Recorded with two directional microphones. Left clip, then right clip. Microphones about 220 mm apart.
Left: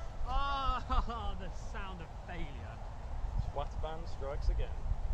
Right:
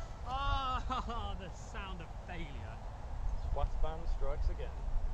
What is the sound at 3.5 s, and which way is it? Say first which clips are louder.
Vehicle: left 1 dB; 45° left (ahead or behind).